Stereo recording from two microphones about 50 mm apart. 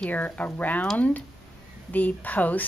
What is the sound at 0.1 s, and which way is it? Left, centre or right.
A woman's voice, left.